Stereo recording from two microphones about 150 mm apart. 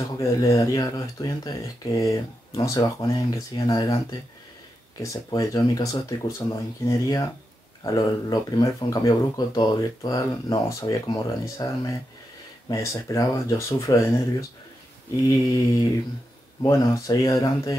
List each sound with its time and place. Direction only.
0.2 s speech: 20° left (ahead or behind)
15.2 s speech: 25° left (ahead or behind)